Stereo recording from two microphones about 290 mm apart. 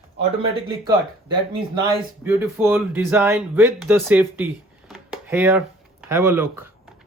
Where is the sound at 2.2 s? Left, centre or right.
Centre.